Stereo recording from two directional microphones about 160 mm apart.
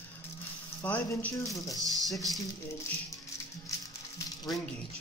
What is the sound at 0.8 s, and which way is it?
Speech, 10° left (ahead or behind).